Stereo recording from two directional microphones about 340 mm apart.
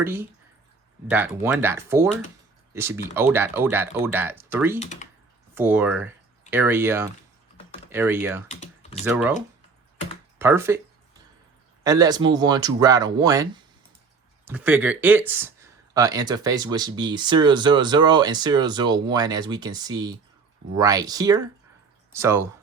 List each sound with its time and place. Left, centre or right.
0.0 s speech: centre
4.8 s speech: left
5.5 s speech: centre
8.4 s speech: centre
9.0 s speech: centre
10.3 s speech: centre
11.8 s speech: centre